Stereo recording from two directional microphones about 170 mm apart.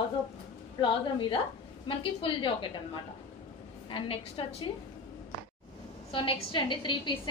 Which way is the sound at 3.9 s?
30° left (ahead or behind).